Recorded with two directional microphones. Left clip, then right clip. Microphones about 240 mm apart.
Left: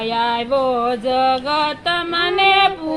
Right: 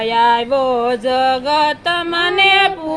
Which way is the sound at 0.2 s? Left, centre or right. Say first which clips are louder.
Right 5 dB; right.